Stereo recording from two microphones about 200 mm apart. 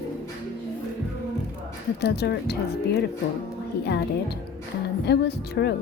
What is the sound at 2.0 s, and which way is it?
Speech, 55° left (ahead or behind).